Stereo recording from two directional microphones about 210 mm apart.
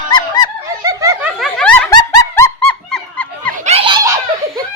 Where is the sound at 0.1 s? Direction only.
20° left (ahead or behind).